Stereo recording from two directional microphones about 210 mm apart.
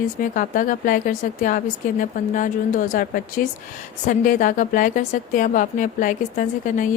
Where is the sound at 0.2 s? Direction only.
40° left (ahead or behind).